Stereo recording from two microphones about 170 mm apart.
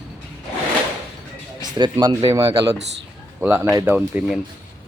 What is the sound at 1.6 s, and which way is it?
Speech, 25° right (ahead or behind).